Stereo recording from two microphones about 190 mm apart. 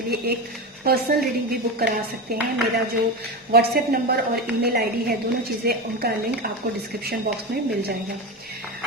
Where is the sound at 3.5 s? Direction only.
55° right (ahead or behind).